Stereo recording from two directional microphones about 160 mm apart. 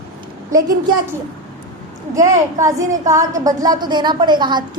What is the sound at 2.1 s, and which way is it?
A woman's voice, 20° right (ahead or behind).